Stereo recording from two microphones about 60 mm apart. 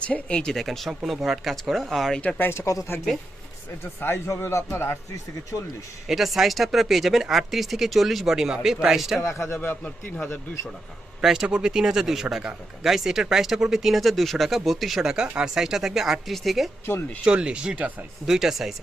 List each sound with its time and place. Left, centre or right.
0.0 s speech: centre
0.5 s speech: centre
2.4 s speech: left
4.0 s a man's voice: left
6.1 s speech: centre
9.2 s speech: left
9.6 s a man's voice: left
11.2 s speech: centre
17.2 s speech: centre
18.3 s speech: centre